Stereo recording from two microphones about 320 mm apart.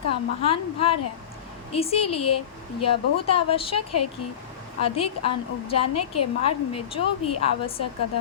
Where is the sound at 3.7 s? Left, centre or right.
Left.